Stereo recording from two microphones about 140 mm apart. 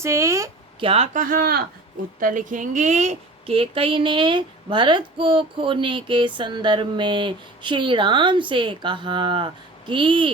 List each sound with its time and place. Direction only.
0.0 s speech: 20° right (ahead or behind)
0.8 s a woman's voice: 40° right (ahead or behind)
1.1 s speech: 85° right
2.1 s a woman's voice: 70° right (ahead or behind); by 10.3 s 35° right (ahead or behind)